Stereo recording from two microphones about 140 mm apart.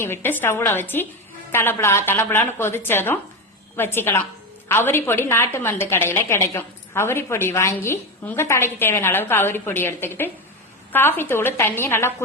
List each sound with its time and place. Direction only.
0.0 s a woman's voice: 15° left (ahead or behind)